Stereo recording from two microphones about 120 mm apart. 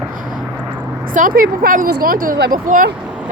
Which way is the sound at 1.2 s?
90° right.